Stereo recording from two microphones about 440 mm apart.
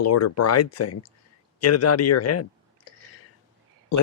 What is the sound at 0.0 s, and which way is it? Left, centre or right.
Speech, left.